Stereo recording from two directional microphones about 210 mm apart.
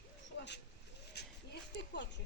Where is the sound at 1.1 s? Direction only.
50° left (ahead or behind).